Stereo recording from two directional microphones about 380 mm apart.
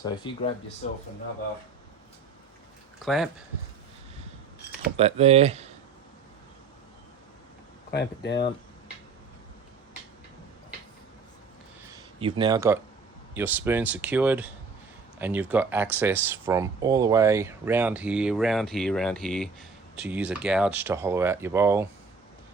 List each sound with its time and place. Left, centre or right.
0.0 s speech: centre
3.0 s speech: centre
4.9 s speech: centre
7.9 s speech: left
11.9 s a sound: centre
13.3 s speech: centre